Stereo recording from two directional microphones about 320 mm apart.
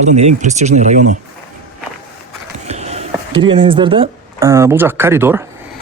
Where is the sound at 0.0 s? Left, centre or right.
Right.